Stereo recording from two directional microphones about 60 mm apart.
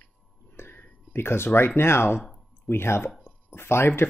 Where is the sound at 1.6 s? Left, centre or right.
Left.